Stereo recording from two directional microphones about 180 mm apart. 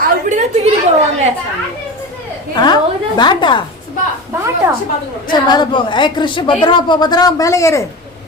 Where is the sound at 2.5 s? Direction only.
25° left (ahead or behind).